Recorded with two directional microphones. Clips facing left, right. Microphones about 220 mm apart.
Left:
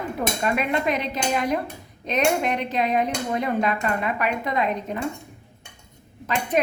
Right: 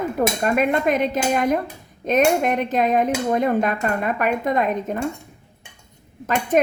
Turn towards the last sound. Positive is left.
turn(degrees=-45)  # may be behind; listen again after turning